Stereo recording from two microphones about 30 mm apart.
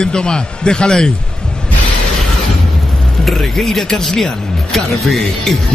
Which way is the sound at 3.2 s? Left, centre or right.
Centre.